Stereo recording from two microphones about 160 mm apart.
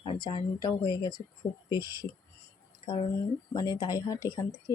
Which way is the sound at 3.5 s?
25° left (ahead or behind).